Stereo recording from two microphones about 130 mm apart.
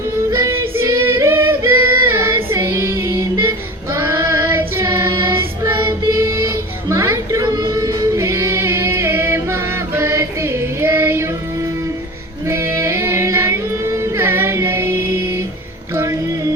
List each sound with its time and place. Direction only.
0.3 s female singing: 20° right (ahead or behind)
3.9 s child singing: 20° right (ahead or behind)
12.5 s music: 20° right (ahead or behind)